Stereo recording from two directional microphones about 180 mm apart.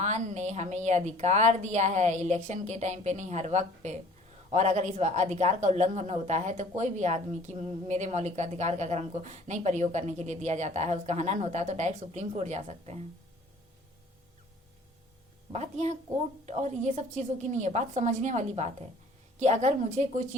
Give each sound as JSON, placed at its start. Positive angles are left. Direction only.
{"t": 0.0, "sound": "speech", "side_deg": -40}
{"t": 15.5, "sound": "speech", "side_deg": -40}